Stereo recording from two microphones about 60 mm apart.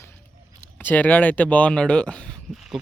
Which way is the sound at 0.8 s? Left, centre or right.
Left.